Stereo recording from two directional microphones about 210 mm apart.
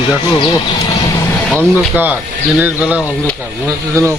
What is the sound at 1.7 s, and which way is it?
Speech, 10° right (ahead or behind).